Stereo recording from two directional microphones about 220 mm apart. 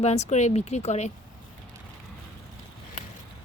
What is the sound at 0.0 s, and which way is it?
Speech, 30° left (ahead or behind).